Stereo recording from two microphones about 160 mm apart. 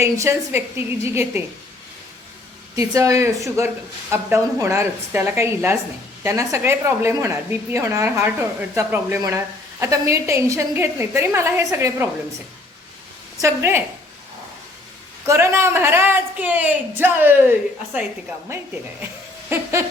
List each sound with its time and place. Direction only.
0.0 s speech: 15° right (ahead or behind)
2.7 s speech: 20° right (ahead or behind)
13.4 s speech: 15° right (ahead or behind)
15.3 s speech: 15° right (ahead or behind)